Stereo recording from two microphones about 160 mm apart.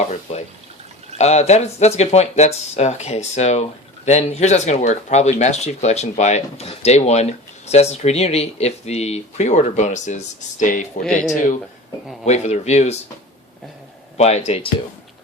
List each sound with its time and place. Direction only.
0.0 s speech: 45° left (ahead or behind)
11.0 s speech: 5° left (ahead or behind)
12.2 s speech: 45° left (ahead or behind)
14.2 s speech: 45° left (ahead or behind)